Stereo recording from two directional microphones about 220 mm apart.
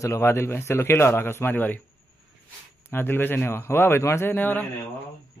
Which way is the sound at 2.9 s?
10° left (ahead or behind).